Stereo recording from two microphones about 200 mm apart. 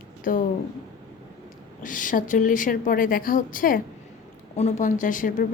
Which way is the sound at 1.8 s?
40° left (ahead or behind).